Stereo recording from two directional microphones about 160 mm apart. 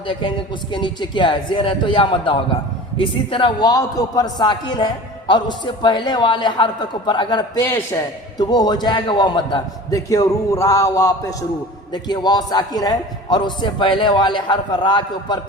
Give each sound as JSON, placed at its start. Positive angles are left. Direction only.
{"t": 0.1, "sound": "a man's voice", "side_deg": 30}